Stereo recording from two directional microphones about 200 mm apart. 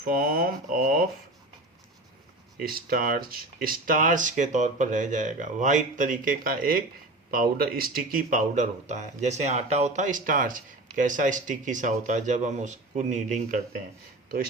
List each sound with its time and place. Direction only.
0.0 s speech: 45° right (ahead or behind)
2.6 s speech: 45° right (ahead or behind)